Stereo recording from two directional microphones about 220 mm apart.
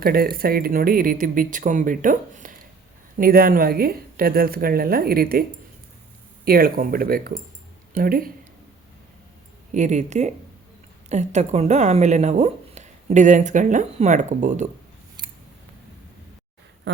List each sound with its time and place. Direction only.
0.0 s a woman's voice: 45° right (ahead or behind)
9.7 s a woman's voice: 30° right (ahead or behind)
16.9 s a sound: 55° right (ahead or behind)